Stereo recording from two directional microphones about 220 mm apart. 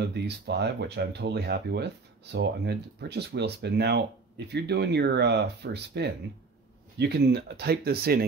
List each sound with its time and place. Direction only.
0.0 s speech: 50° right (ahead or behind)